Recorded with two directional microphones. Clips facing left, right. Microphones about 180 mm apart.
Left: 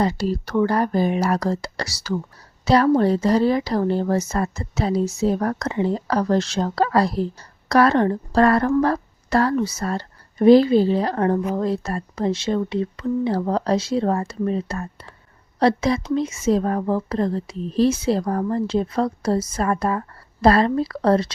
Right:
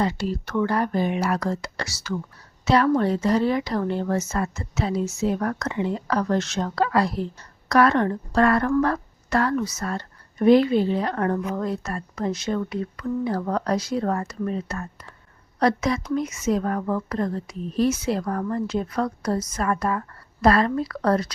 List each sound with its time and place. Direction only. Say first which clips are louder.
0.0 s a woman's voice: left 3 dB; 35° left (ahead or behind)